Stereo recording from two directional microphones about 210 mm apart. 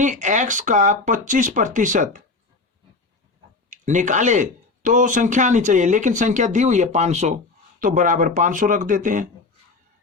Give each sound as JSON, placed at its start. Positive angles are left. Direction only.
{"t": 0.0, "sound": "speech", "side_deg": -35}
{"t": 3.7, "sound": "speech", "side_deg": -35}